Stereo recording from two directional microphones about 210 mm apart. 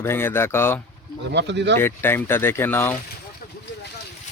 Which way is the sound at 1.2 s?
55° right (ahead or behind).